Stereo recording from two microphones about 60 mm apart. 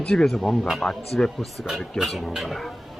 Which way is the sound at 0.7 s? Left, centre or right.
Centre.